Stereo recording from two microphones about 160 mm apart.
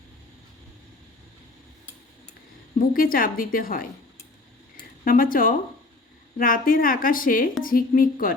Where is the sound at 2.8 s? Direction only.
60° left (ahead or behind).